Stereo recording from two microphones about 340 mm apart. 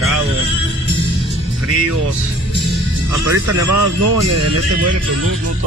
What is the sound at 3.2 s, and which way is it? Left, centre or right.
Speech, right.